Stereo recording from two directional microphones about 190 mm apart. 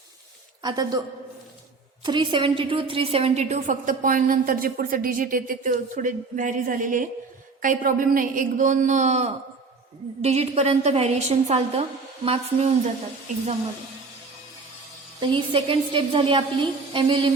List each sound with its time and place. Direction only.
0.6 s a woman's voice: 20° right (ahead or behind)
2.0 s a woman's voice: 25° right (ahead or behind)
15.2 s a woman's voice: 25° right (ahead or behind)